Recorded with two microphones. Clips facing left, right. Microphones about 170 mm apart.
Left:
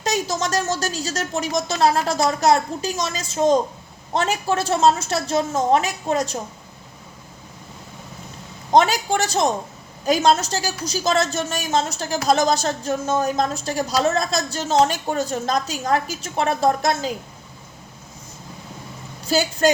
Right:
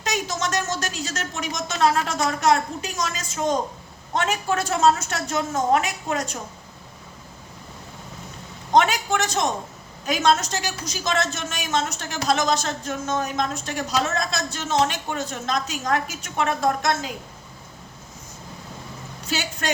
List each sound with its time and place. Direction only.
0.0 s a woman's voice: 35° left (ahead or behind)
8.7 s a woman's voice: 35° left (ahead or behind)
19.3 s a woman's voice: 35° left (ahead or behind)